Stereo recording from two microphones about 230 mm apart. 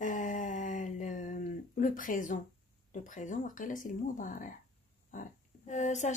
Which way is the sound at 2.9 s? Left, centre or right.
Left.